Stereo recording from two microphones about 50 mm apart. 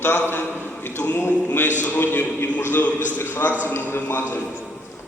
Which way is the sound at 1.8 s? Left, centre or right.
Left.